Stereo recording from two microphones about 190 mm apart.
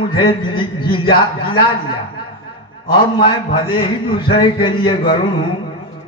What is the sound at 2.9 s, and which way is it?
A man's voice, 25° left (ahead or behind).